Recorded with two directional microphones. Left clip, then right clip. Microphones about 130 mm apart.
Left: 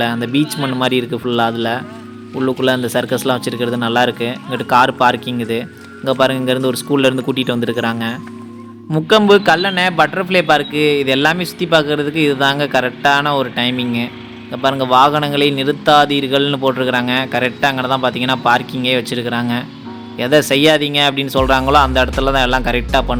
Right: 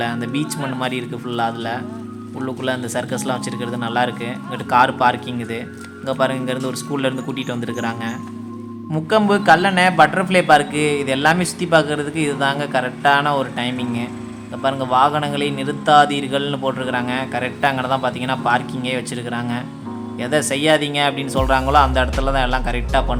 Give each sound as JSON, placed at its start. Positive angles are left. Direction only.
{"t": 0.0, "sound": "a man's voice", "side_deg": 30}